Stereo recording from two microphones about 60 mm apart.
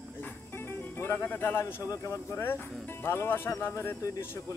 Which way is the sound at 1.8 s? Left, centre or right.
Left.